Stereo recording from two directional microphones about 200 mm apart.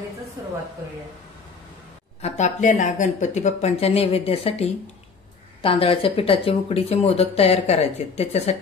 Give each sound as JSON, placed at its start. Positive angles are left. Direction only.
{"t": 2.2, "sound": "speech", "side_deg": 35}